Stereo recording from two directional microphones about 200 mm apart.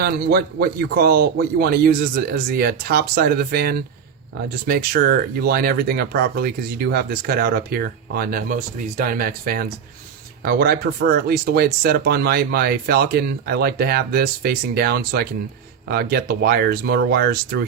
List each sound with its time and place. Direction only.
0.0 s speech: 50° right (ahead or behind)